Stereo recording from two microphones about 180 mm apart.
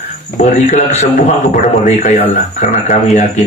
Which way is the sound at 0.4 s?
40° left (ahead or behind).